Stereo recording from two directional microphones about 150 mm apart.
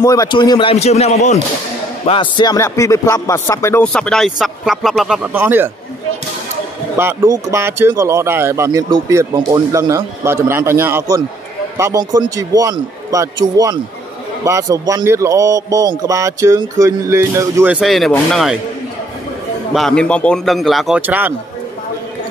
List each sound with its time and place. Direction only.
0.0 s speech: 25° left (ahead or behind)
0.7 s a man's voice: 45° left (ahead or behind)
2.0 s speech: 30° left (ahead or behind)
3.8 s speech: 5° left (ahead or behind); by 5.7 s 15° right (ahead or behind)
7.0 s a man's voice: 20° right (ahead or behind)
17.7 s speech: centre (ahead or behind)
19.7 s speech: 5° left (ahead or behind)
21.0 s speech: 10° right (ahead or behind)